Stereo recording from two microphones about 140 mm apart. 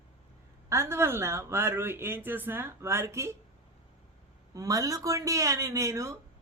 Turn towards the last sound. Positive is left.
turn(degrees=-20)  # may be behind; listen again after turning